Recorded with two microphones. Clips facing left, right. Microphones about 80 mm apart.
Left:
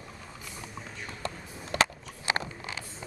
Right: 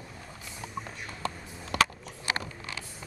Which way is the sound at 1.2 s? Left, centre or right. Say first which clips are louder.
Right 3 dB; left.